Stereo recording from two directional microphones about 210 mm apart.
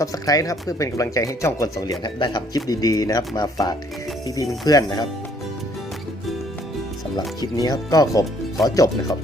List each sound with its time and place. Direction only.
0.0 s speech: 15° left (ahead or behind)
7.2 s speech: 15° left (ahead or behind)